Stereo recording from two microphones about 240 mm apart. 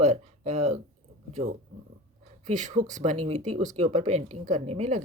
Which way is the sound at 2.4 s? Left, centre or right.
Right.